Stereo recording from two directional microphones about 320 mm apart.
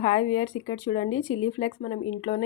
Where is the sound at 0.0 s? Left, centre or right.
Centre.